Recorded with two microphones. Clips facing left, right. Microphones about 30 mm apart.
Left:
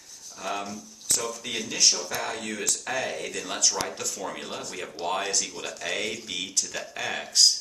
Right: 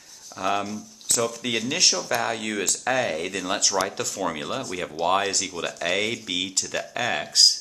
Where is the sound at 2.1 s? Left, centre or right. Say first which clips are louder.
Right 6 dB; right.